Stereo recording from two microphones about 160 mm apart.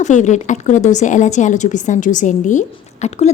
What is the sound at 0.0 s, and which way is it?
A woman's voice, 50° left (ahead or behind).